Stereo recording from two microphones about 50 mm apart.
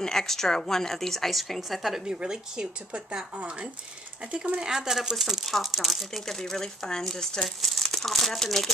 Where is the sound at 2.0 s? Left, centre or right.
Centre.